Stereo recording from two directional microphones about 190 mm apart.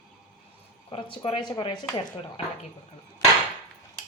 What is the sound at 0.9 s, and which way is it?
Speech, 25° left (ahead or behind).